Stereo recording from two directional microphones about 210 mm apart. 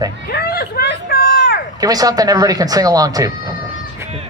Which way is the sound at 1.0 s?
50° left (ahead or behind).